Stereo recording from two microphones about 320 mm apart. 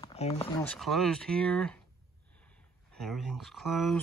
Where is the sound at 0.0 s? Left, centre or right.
Centre.